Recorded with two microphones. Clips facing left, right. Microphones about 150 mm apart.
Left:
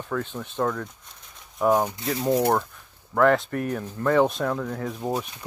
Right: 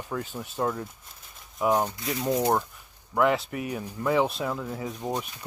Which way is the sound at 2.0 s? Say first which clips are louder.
Left 4 dB; 30° left (ahead or behind).